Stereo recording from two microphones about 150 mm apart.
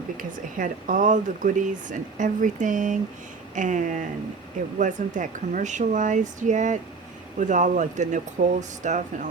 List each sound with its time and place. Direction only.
0.2 s speech: 60° right (ahead or behind)